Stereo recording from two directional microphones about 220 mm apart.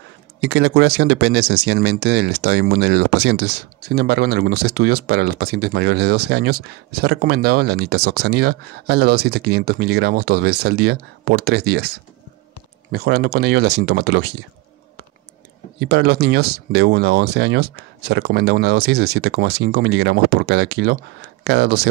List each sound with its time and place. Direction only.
0.4 s speech: 50° right (ahead or behind)
15.8 s speech: 45° right (ahead or behind)